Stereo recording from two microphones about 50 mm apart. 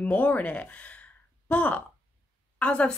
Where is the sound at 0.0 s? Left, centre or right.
Left.